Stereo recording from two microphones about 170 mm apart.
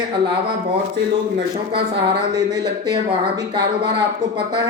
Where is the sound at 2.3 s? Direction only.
25° right (ahead or behind).